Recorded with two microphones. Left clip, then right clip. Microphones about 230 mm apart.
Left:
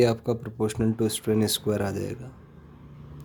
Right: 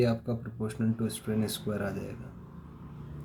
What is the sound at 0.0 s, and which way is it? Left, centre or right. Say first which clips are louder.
Speech: left 7 dB; left.